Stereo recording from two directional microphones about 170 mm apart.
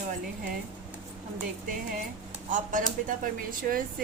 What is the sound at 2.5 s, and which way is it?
Speech, 50° right (ahead or behind).